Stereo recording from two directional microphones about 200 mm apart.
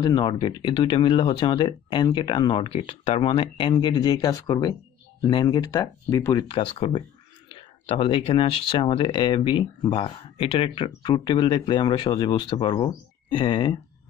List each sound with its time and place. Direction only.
0.0 s speech: 20° left (ahead or behind)